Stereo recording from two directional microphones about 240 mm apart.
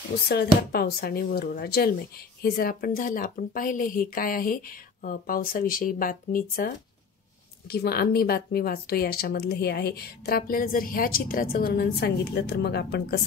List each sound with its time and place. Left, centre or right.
0.3 s speech: left